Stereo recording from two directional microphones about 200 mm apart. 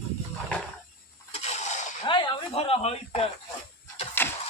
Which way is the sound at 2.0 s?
25° left (ahead or behind).